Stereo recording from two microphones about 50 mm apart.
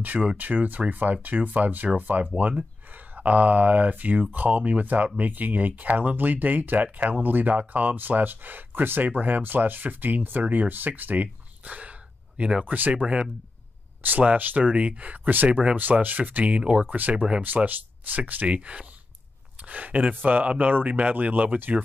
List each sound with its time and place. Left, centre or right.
0.0 s speech: right
12.6 s speech: right
13.0 s speech: centre
14.2 s speech: right
17.4 s speech: right
18.5 s speech: right